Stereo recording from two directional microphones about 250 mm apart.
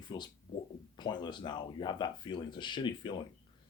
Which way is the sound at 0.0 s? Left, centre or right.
Centre.